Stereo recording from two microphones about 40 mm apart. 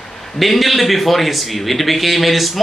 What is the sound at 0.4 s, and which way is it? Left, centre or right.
A man's voice, centre.